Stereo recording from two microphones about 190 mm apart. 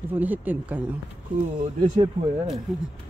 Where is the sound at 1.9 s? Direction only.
25° right (ahead or behind).